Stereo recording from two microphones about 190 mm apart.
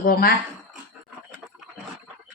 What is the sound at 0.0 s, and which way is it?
Speech, 50° left (ahead or behind).